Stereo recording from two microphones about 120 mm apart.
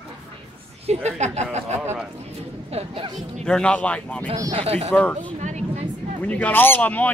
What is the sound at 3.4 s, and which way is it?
Speech, 5° left (ahead or behind).